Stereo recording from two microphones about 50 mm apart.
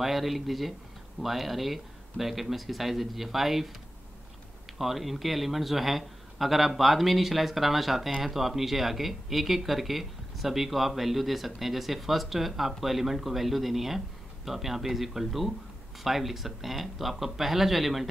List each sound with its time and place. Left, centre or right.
0.0 s speech: centre
4.7 s speech: centre